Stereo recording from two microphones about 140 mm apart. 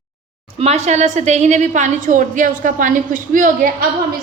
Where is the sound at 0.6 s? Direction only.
50° right (ahead or behind); by 3.8 s 75° right (ahead or behind).